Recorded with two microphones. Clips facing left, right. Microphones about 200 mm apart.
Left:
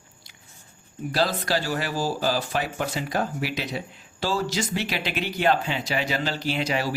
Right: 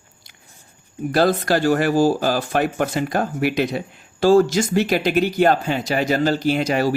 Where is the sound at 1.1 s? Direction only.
55° right (ahead or behind).